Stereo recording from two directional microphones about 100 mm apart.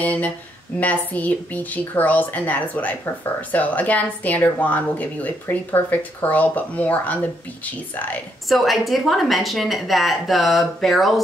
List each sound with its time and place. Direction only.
0.0 s speech: 15° left (ahead or behind)
8.5 s a woman's voice: centre (ahead or behind)